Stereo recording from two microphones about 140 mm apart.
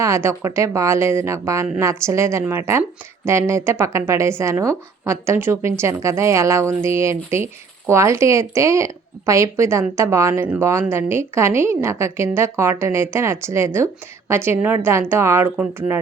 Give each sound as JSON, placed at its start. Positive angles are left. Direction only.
{"t": 0.0, "sound": "a woman's voice", "side_deg": -20}